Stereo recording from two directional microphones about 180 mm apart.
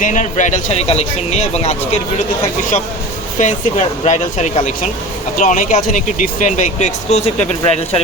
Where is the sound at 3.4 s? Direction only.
40° left (ahead or behind).